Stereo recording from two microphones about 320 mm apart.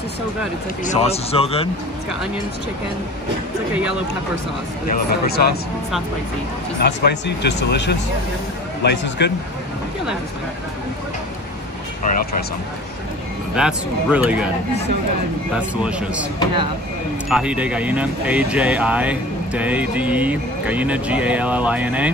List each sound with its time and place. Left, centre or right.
0.8 s speech: centre
4.8 s speech: left
6.8 s speech: left
12.0 s speech: left
13.6 s speech: centre
15.8 s speech: centre
17.3 s speech: centre